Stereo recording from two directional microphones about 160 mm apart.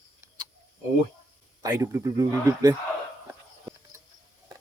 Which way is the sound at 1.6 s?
20° right (ahead or behind).